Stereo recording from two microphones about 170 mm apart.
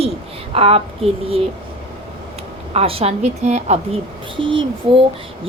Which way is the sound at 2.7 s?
35° right (ahead or behind).